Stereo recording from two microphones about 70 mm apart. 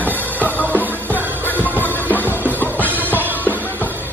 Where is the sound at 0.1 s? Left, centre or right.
Left.